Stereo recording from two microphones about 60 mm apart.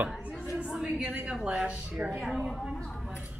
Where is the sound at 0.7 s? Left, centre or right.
Centre.